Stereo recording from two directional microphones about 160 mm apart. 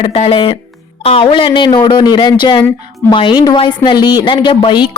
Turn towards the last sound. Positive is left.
turn(degrees=30)  # may be behind; listen again after turning